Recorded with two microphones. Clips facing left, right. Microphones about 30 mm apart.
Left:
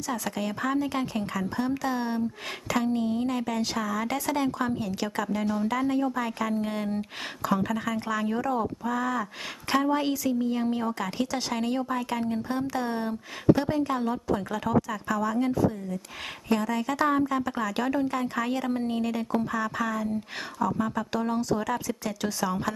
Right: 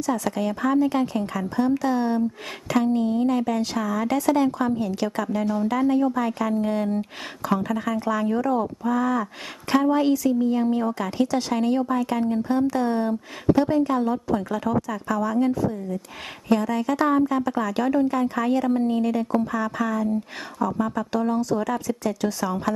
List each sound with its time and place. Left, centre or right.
0.0 s a woman's voice: centre